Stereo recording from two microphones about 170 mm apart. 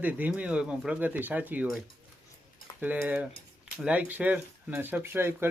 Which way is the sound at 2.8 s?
10° right (ahead or behind).